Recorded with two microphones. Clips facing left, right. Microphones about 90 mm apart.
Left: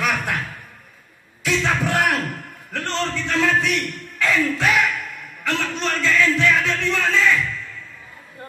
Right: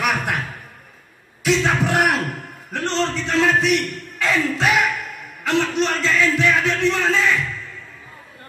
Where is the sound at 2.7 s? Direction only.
20° right (ahead or behind).